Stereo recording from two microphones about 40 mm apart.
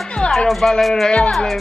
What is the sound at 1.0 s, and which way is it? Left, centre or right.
Speech, left.